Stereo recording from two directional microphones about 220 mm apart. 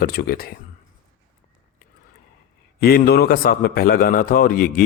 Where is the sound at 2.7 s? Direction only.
45° left (ahead or behind).